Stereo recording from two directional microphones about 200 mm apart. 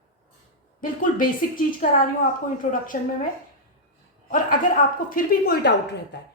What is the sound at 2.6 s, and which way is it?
Speech, 40° left (ahead or behind).